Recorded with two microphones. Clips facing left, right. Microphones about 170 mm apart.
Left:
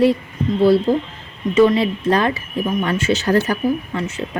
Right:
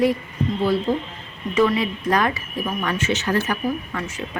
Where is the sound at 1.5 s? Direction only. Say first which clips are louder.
Left 5 dB; 30° left (ahead or behind).